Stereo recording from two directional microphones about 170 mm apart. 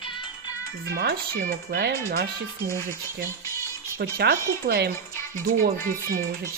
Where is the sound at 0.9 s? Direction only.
65° right (ahead or behind).